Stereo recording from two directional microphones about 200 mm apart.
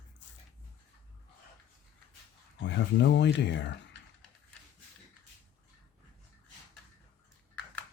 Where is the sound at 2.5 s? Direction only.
65° left (ahead or behind).